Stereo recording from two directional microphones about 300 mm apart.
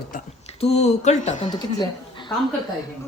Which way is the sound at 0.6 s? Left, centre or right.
Left.